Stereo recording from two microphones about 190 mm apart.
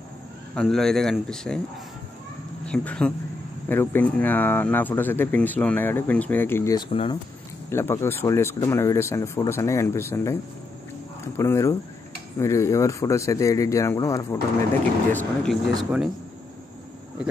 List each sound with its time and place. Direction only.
0.6 s speech: centre (ahead or behind)
2.6 s speech: 5° left (ahead or behind); by 7.2 s 25° left (ahead or behind)
7.7 s speech: 15° left (ahead or behind)
11.3 s speech: 15° left (ahead or behind)
15.1 s speech: centre (ahead or behind)